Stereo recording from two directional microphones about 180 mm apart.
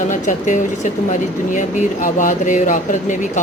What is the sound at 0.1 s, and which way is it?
Speech, 45° left (ahead or behind).